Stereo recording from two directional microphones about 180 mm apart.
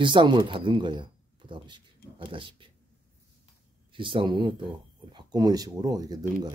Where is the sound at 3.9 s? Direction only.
30° right (ahead or behind).